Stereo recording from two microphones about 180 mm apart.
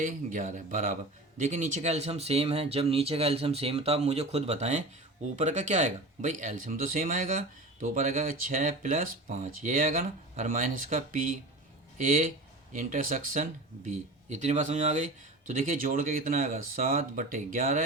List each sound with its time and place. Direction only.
0.0 s speech: 45° right (ahead or behind)